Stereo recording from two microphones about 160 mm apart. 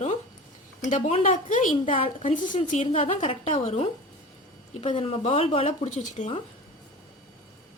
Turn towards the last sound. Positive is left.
turn(degrees=50)  # may be behind; listen again after turning